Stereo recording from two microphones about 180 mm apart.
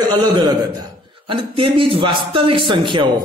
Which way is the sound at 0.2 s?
20° right (ahead or behind).